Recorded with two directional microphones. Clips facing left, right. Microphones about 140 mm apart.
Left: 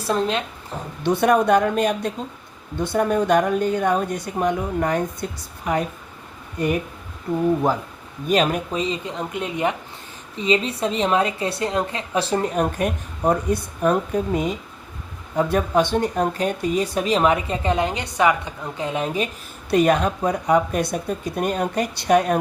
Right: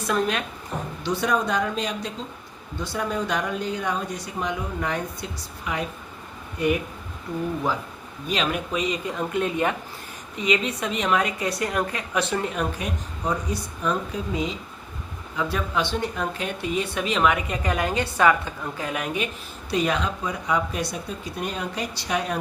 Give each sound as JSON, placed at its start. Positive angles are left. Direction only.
{"t": 0.0, "sound": "speech", "side_deg": 30}
{"t": 1.0, "sound": "speech", "side_deg": 55}
{"t": 8.3, "sound": "speech", "side_deg": 45}
{"t": 10.3, "sound": "a woman's voice", "side_deg": 30}
{"t": 19.7, "sound": "speech", "side_deg": 50}